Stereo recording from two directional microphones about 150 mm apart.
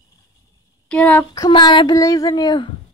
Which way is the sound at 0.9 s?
10° left (ahead or behind).